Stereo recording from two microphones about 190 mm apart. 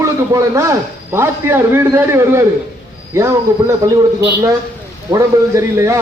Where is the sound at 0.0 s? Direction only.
15° right (ahead or behind).